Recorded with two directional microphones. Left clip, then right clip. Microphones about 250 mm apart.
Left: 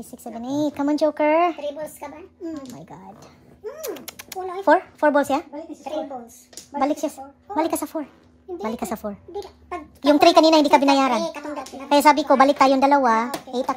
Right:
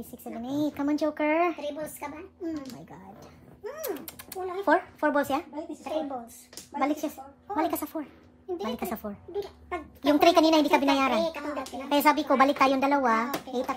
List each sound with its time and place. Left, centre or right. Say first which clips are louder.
0.2 s speech: left 6 dB; left
1.6 s a woman's voice: left 5 dB; centre
3.8 s speech: left 1 dB; left
6.8 s speech: left 6 dB; left